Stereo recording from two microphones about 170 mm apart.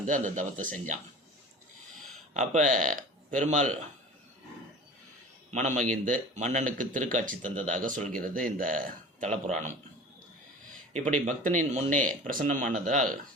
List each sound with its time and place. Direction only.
0.1 s speech: 50° right (ahead or behind)
2.3 s speech: 45° right (ahead or behind)
5.5 s speech: 45° right (ahead or behind)
9.3 s speech: 40° right (ahead or behind)
10.9 s speech: 50° right (ahead or behind)